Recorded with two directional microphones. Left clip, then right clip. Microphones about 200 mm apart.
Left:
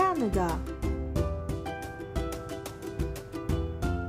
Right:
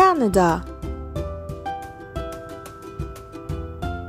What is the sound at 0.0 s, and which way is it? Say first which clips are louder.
Music: right 11 dB; 45° right (ahead or behind).